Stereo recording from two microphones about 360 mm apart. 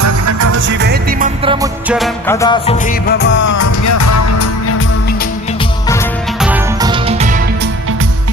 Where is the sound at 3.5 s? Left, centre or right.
Left.